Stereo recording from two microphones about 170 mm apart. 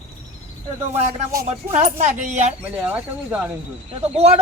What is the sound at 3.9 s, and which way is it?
Speech, 35° right (ahead or behind).